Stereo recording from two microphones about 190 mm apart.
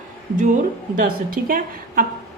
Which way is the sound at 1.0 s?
50° right (ahead or behind).